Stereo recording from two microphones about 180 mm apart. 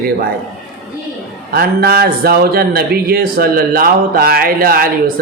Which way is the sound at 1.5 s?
60° right (ahead or behind).